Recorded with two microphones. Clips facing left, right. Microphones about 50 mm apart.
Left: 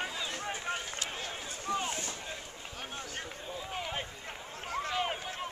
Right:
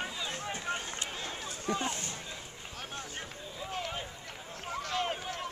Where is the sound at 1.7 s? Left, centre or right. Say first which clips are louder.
Even; right.